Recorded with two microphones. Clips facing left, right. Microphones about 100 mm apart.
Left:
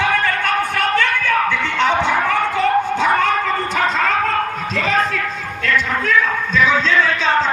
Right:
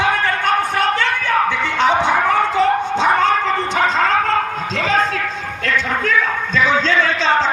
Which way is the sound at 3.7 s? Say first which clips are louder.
Right 2 dB; 30° right (ahead or behind).